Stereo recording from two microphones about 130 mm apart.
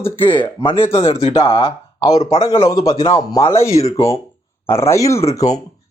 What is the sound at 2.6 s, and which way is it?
Speech, 25° left (ahead or behind).